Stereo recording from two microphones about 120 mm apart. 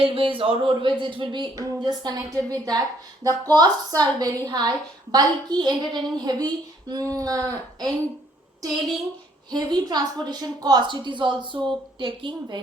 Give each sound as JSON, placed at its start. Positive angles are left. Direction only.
{"t": 0.0, "sound": "speech", "side_deg": -50}
{"t": 1.5, "sound": "a woman's voice", "side_deg": -30}
{"t": 9.5, "sound": "a woman's voice", "side_deg": -35}